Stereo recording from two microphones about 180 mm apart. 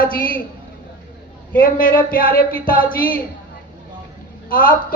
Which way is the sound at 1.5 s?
50° left (ahead or behind).